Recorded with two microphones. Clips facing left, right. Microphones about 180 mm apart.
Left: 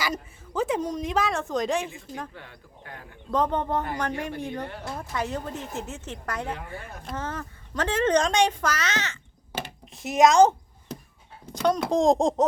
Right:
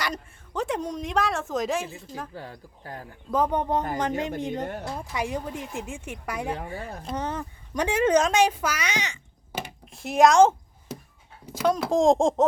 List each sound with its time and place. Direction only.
0.0 s a woman's voice: 5° left (ahead or behind)
2.3 s speech: 35° right (ahead or behind)
3.3 s speech: 10° right (ahead or behind)
6.7 s speech: 35° right (ahead or behind)
7.1 s speech: 20° right (ahead or behind)
9.9 s a woman's voice: centre (ahead or behind)
11.5 s a woman's voice: 5° right (ahead or behind)